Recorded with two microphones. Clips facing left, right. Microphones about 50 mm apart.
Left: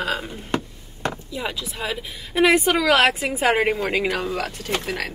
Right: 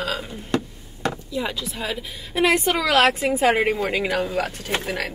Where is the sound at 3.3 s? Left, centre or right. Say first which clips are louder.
Right 1 dB; centre.